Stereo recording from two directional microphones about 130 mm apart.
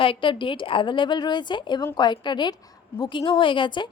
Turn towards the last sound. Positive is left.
turn(degrees=40)  # may be behind; listen again after turning